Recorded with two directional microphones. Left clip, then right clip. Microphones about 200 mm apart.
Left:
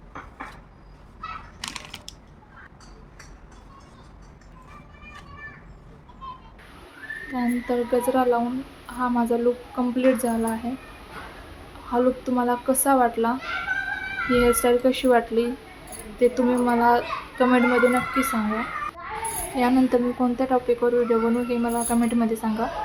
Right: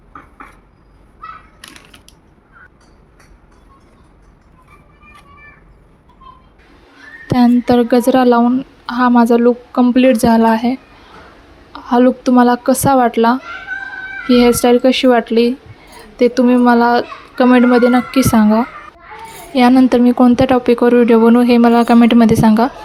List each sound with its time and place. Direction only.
7.3 s speech: 50° right (ahead or behind)
11.9 s speech: 45° right (ahead or behind)
19.5 s speech: 45° right (ahead or behind)